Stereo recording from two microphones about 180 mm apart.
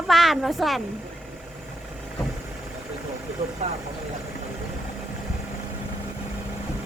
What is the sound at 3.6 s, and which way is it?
Speech, 40° right (ahead or behind).